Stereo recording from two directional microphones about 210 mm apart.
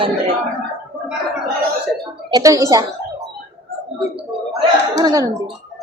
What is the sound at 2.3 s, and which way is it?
Speech, 15° right (ahead or behind).